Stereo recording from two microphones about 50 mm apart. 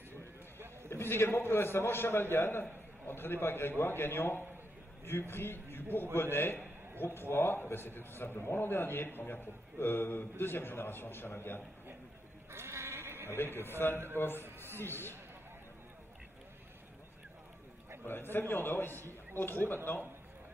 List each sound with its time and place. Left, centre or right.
0.8 s a man's voice: left
12.4 s bleat: right
13.6 s a man's voice: left
18.3 s a man's voice: left